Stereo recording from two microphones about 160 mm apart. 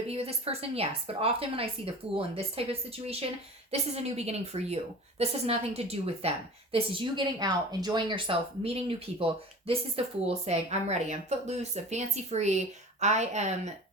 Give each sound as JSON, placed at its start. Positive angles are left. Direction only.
{"t": 0.1, "sound": "a woman's voice", "side_deg": -40}
{"t": 3.7, "sound": "a woman's voice", "side_deg": -40}